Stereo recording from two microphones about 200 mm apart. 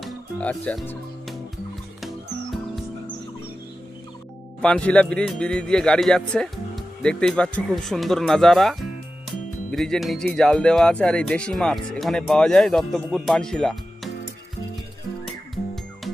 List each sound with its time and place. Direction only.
0.0 s music: 5° left (ahead or behind)
4.6 s speech: 5° left (ahead or behind)
9.7 s speech: centre (ahead or behind)